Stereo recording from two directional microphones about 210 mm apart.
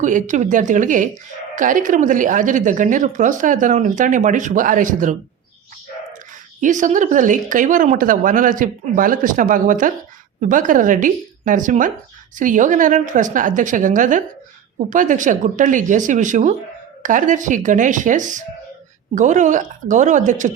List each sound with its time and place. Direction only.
0.0 s a woman's voice: 35° right (ahead or behind)
6.6 s a woman's voice: 35° right (ahead or behind)